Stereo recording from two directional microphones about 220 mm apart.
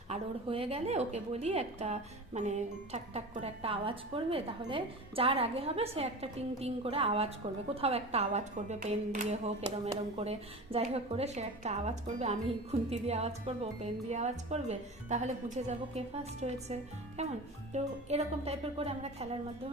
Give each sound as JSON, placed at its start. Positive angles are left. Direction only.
{"t": 0.1, "sound": "a woman's voice", "side_deg": -25}